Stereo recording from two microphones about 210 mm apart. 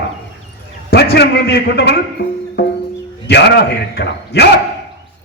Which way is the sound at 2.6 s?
50° left (ahead or behind).